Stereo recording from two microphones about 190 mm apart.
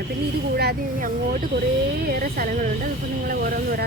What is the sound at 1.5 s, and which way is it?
Speech, 70° right (ahead or behind).